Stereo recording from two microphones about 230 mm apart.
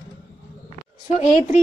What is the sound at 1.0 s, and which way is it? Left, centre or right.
Speech, left.